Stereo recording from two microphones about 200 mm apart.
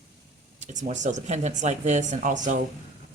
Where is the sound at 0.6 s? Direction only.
40° right (ahead or behind).